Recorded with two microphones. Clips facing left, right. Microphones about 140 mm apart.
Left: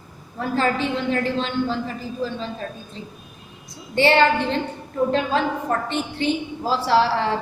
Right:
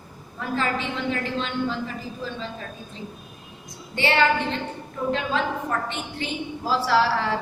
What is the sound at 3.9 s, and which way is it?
Speech, 35° left (ahead or behind).